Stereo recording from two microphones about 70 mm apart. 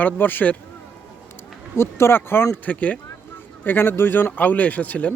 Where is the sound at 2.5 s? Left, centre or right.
Left.